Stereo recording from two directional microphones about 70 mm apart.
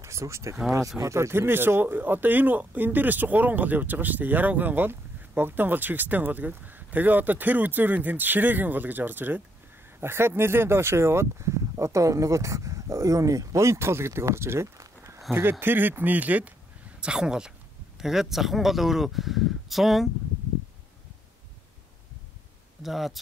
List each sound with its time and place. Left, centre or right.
0.0 s speech: right
14.8 s a sound: right
15.6 s speech: right
17.0 s speech: centre
22.8 s speech: centre